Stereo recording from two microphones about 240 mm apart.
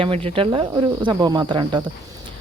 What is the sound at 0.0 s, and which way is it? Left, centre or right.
Speech, right.